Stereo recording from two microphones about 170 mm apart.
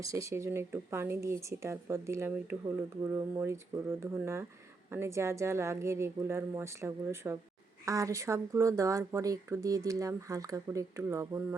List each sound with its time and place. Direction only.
0.0 s a woman's voice: 20° right (ahead or behind)